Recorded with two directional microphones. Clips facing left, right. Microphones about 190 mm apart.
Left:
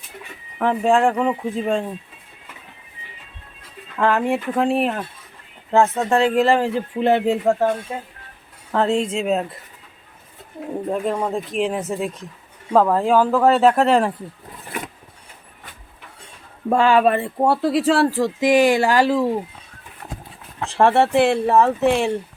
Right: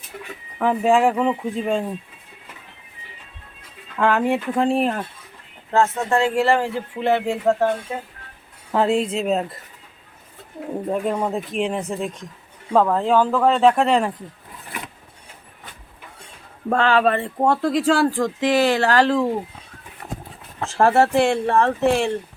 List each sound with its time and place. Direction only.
0.6 s speech: centre (ahead or behind)
3.9 s speech: centre (ahead or behind)
5.7 s speech: 20° left (ahead or behind)
8.7 s speech: 5° right (ahead or behind)
10.8 s speech: centre (ahead or behind)
16.6 s speech: 10° left (ahead or behind)
20.7 s speech: centre (ahead or behind)